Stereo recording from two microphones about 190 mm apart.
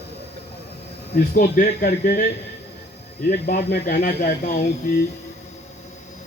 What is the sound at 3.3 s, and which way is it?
Speech, 60° left (ahead or behind).